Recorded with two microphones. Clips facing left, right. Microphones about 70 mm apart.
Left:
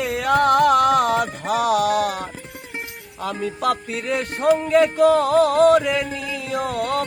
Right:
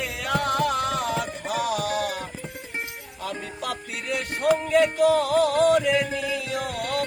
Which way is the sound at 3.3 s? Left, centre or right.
Left.